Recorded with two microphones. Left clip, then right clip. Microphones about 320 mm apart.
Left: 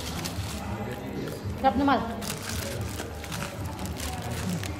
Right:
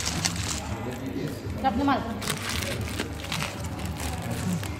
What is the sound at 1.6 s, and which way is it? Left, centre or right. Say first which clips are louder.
Speech: left 2 dB; left.